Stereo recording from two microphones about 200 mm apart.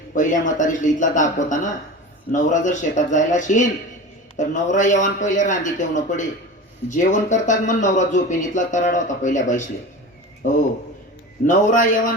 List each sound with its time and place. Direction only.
0.2 s a man's voice: 40° left (ahead or behind)
11.4 s a man's voice: 40° left (ahead or behind)